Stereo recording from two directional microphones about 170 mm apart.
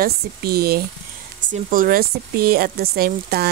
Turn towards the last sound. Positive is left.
turn(degrees=-65)  # may be behind; listen again after turning